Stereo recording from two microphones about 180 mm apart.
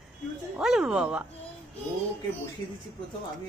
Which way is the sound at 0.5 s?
5° right (ahead or behind).